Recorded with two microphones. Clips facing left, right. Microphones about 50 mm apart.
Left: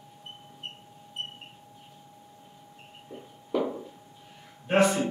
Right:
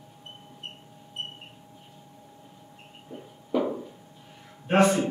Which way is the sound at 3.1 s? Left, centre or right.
Centre.